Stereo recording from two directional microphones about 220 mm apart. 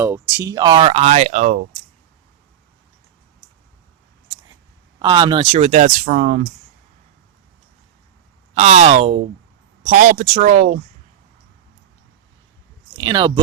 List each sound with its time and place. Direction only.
0.0 s speech: 10° right (ahead or behind); by 1.6 s 35° right (ahead or behind)
4.9 s speech: 20° right (ahead or behind); by 6.4 s 35° right (ahead or behind)
8.5 s speech: 30° right (ahead or behind)
13.0 s speech: 20° right (ahead or behind)